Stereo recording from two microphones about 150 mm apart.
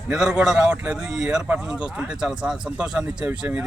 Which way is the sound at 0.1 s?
5° right (ahead or behind).